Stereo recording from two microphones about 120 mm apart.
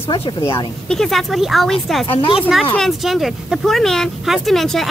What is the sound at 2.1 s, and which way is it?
Speech, 50° left (ahead or behind).